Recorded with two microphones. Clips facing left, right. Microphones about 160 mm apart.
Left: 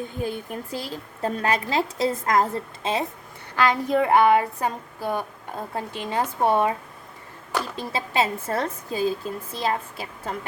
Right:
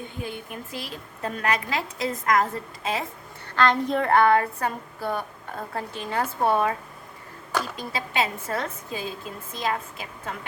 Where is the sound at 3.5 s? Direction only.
5° left (ahead or behind).